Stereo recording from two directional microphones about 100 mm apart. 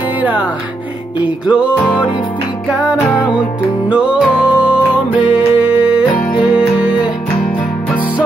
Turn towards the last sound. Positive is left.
turn(degrees=-10)  # may be behind; listen again after turning